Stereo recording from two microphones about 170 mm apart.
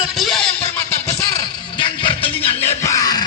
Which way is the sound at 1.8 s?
30° left (ahead or behind).